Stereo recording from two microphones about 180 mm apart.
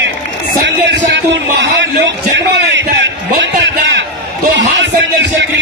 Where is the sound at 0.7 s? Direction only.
85° right.